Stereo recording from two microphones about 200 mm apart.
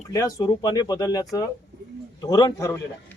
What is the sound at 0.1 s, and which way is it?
Speech, 15° left (ahead or behind).